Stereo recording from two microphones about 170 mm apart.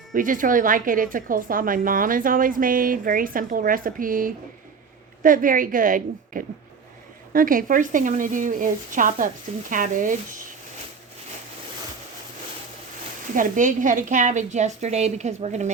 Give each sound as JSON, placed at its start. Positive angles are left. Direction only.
{"t": 0.1, "sound": "speech", "side_deg": -50}
{"t": 13.3, "sound": "speech", "side_deg": -50}